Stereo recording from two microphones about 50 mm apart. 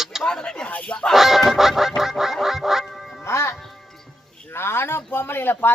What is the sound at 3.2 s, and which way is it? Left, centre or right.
Music, left.